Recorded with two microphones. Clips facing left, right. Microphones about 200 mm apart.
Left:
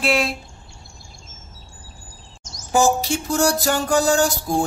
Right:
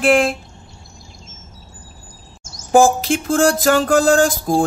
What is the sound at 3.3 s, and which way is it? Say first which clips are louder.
Music: right 5 dB; 90° right.